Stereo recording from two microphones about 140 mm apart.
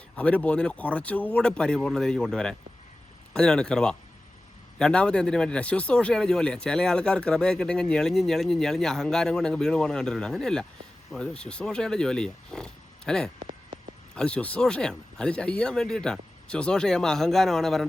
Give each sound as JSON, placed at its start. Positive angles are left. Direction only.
{"t": 0.2, "sound": "speech", "side_deg": 10}
{"t": 13.4, "sound": "a sound", "side_deg": -65}
{"t": 14.2, "sound": "speech", "side_deg": 10}